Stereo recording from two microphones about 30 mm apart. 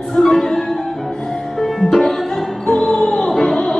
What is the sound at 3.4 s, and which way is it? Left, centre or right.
Music, left.